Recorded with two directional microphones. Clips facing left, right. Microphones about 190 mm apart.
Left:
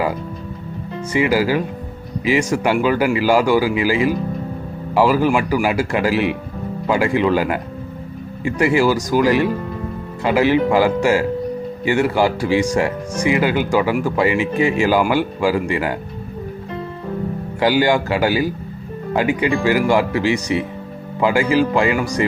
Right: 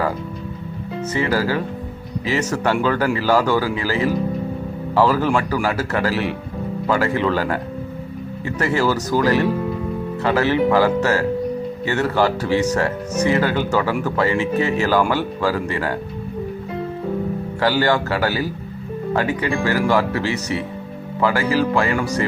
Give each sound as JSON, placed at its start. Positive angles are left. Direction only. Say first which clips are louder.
{"t": 1.1, "sound": "speech", "louder": "left 4 dB", "side_deg": 10}
{"t": 17.6, "sound": "speech", "louder": "left 3 dB", "side_deg": 15}